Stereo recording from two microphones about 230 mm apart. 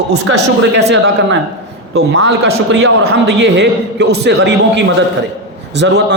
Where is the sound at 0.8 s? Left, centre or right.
Right.